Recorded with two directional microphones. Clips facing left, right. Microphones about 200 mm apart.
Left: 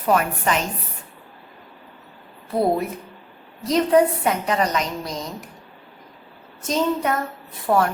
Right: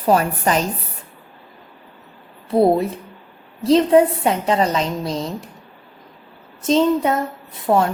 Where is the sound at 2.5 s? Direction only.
25° right (ahead or behind).